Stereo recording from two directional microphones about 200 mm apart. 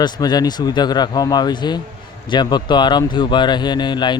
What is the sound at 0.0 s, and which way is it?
Speech, 20° left (ahead or behind).